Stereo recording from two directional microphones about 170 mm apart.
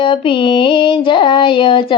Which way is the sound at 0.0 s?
30° left (ahead or behind).